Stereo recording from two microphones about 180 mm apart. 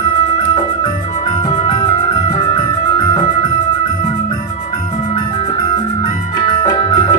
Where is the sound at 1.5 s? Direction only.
25° left (ahead or behind).